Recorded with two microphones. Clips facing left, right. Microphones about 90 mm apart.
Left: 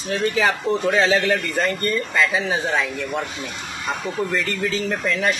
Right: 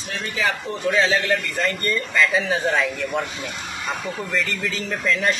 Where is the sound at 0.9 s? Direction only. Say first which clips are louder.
Even; 60° left (ahead or behind).